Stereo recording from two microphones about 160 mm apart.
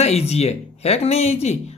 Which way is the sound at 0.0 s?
40° left (ahead or behind).